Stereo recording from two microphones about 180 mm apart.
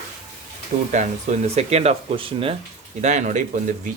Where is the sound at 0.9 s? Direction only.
40° right (ahead or behind).